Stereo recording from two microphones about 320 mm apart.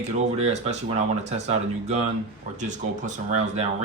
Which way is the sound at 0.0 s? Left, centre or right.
Right.